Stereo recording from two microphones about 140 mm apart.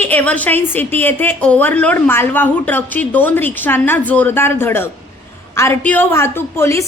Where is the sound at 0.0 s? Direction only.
10° left (ahead or behind).